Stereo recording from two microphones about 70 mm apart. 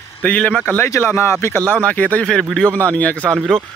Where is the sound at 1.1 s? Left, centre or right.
Left.